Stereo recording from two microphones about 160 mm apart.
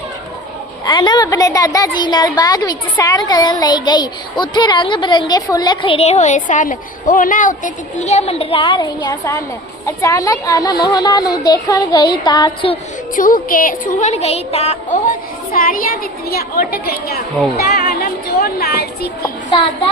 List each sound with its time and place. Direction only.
0.9 s a woman's voice: 25° left (ahead or behind)
13.1 s a sound: 60° left (ahead or behind); by 14.8 s 40° left (ahead or behind)
15.5 s a child's voice: 65° left (ahead or behind)
16.3 s a child's voice: 75° left (ahead or behind)
19.5 s a child's voice: 30° left (ahead or behind)